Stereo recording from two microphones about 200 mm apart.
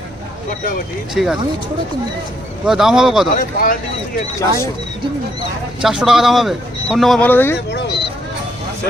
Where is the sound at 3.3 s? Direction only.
45° left (ahead or behind).